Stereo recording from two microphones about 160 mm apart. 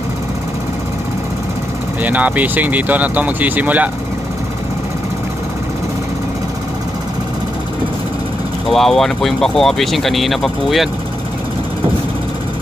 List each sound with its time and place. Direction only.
2.0 s speech: 10° right (ahead or behind)
8.6 s speech: centre (ahead or behind)